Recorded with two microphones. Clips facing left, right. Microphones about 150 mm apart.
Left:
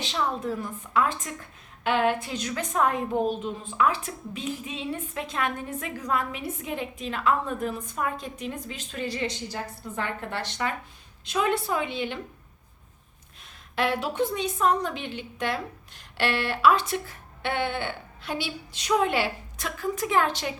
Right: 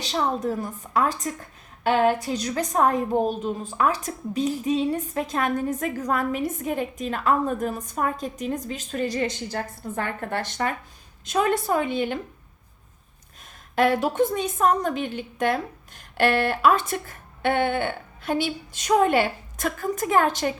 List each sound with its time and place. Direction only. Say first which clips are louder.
0.0 s a woman's voice: right 4 dB; 40° right (ahead or behind)
13.7 s speech: right 5 dB; 45° right (ahead or behind)